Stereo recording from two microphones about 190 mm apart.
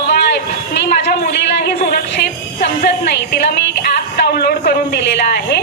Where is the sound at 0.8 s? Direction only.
55° left (ahead or behind).